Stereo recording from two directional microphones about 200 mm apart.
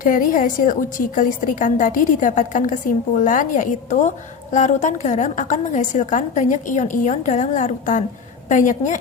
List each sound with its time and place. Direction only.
0.0 s a woman's voice: 45° left (ahead or behind)